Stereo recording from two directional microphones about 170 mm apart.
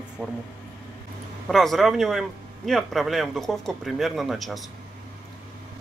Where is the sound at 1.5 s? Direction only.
Centre (ahead or behind).